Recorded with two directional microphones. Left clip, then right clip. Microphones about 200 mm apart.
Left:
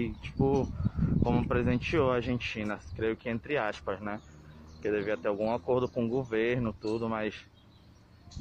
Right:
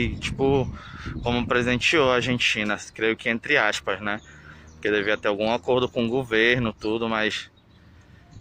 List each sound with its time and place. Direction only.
0.0 s speech: 10° right (ahead or behind)